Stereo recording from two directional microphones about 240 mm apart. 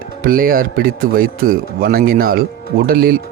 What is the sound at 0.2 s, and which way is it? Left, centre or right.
Speech, right.